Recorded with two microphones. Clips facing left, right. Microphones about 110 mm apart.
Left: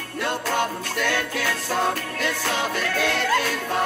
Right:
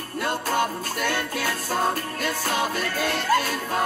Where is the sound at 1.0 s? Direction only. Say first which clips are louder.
Left 1 dB; 35° right (ahead or behind).